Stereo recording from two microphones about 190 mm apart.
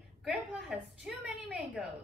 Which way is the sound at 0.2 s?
5° right (ahead or behind).